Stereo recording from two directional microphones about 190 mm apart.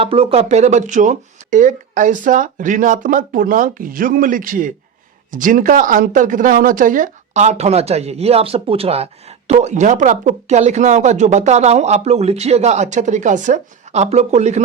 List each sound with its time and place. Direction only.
0.0 s speech: 30° right (ahead or behind)